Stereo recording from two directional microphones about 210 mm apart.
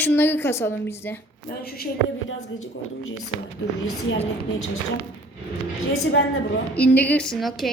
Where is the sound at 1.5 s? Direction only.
45° left (ahead or behind).